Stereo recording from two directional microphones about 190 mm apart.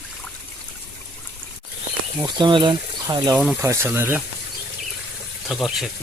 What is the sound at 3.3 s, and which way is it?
Speech, 10° right (ahead or behind).